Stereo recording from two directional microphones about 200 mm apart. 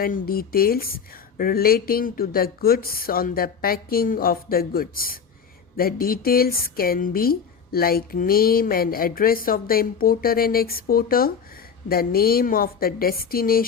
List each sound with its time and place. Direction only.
0.0 s a woman's voice: 50° left (ahead or behind)